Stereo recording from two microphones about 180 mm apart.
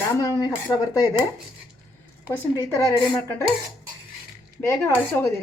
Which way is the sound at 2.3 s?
15° left (ahead or behind).